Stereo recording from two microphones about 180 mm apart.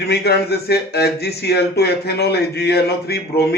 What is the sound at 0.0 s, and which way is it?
Speech, 65° left (ahead or behind).